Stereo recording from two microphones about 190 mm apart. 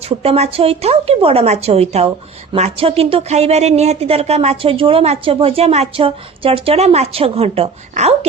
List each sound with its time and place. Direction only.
0.2 s speech: 30° right (ahead or behind)